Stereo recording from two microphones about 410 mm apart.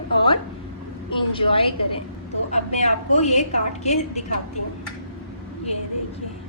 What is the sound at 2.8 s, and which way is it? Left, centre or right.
A woman's voice, centre.